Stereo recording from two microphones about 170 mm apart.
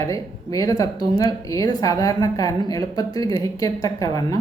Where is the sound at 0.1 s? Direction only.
20° left (ahead or behind).